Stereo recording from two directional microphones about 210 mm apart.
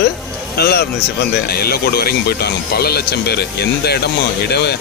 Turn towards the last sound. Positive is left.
turn(degrees=50)  # may be behind; listen again after turning